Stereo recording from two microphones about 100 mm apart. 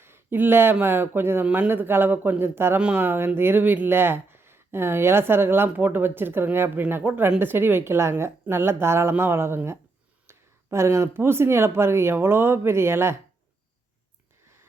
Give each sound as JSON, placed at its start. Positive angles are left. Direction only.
{"t": 0.0, "sound": "speech", "side_deg": -25}